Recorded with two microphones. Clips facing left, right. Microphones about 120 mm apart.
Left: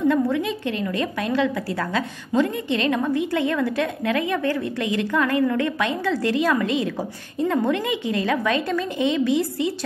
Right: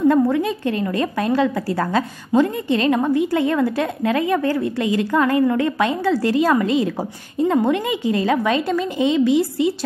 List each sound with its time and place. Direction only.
0.1 s a woman's voice: 40° right (ahead or behind)